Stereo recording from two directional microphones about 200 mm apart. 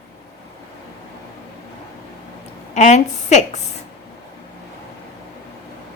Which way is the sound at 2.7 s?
35° left (ahead or behind).